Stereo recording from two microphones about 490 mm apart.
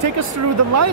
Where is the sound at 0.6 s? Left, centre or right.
Right.